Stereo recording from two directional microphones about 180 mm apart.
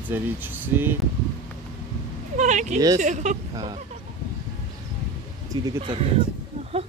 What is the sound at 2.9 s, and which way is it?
Speech, 40° right (ahead or behind).